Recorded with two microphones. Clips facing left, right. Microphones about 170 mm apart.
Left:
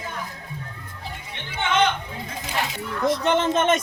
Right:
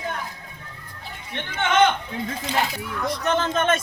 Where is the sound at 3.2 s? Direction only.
20° left (ahead or behind).